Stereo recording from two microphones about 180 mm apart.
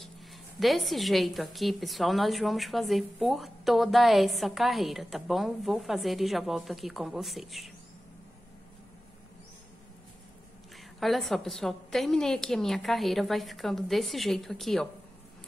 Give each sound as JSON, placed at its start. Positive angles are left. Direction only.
{"t": 0.6, "sound": "a woman's voice", "side_deg": 0}
{"t": 11.0, "sound": "a woman's voice", "side_deg": 0}